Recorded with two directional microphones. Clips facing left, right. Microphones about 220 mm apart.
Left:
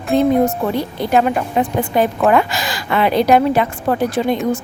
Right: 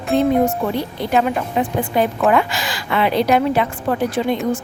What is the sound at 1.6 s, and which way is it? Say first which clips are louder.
Speech: left 2 dB; 45° left (ahead or behind).